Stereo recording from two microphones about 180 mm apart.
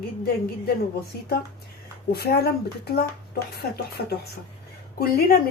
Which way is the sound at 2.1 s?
60° left (ahead or behind).